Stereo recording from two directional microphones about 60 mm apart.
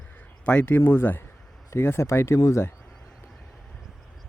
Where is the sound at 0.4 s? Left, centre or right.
Left.